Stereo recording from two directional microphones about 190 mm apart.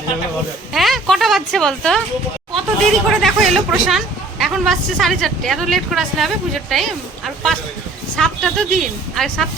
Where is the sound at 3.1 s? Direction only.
Centre (ahead or behind).